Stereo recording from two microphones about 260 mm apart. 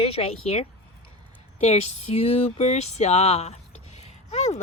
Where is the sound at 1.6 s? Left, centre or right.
Left.